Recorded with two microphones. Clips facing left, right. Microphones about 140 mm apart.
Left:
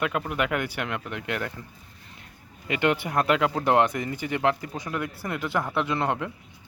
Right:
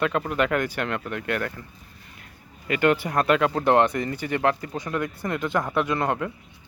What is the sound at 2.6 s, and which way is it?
Speech, 20° left (ahead or behind).